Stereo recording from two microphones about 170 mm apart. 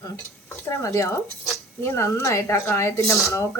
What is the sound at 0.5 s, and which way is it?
Speech, 15° left (ahead or behind).